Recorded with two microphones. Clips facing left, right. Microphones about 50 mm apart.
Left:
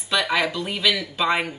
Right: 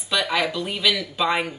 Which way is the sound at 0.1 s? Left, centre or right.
Centre.